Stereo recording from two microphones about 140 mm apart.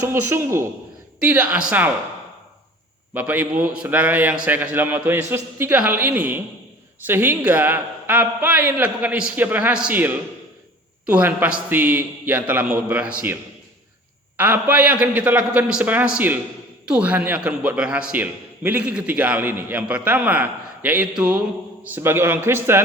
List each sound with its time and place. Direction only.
0.1 s a man's voice: 20° right (ahead or behind)
3.2 s a man's voice: 10° right (ahead or behind)